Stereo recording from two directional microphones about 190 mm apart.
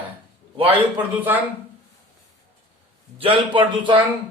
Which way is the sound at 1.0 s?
10° right (ahead or behind).